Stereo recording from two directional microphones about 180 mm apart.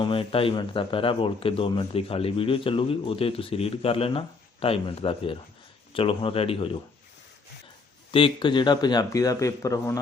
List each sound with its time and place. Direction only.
0.0 s speech: 30° left (ahead or behind)
8.1 s a man's voice: 30° left (ahead or behind)